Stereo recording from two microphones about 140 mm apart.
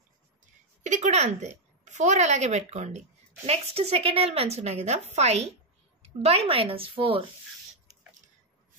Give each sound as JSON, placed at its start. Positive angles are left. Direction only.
{"t": 0.8, "sound": "a woman's voice", "side_deg": -55}